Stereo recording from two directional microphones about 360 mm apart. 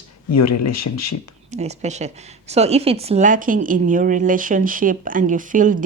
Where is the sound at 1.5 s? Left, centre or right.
Centre.